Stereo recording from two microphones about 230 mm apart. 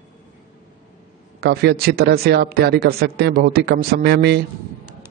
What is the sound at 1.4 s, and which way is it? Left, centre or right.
Speech, right.